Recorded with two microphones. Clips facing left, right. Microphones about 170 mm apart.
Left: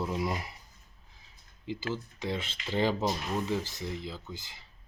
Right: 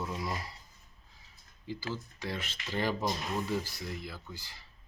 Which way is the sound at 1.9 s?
20° left (ahead or behind).